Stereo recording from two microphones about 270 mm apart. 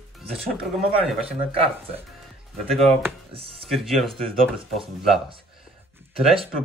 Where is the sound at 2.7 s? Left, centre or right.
Centre.